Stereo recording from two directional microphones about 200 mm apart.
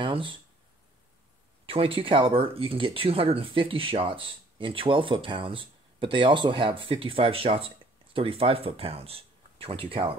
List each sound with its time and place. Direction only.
0.0 s speech: 25° right (ahead or behind)
1.7 s speech: 25° right (ahead or behind)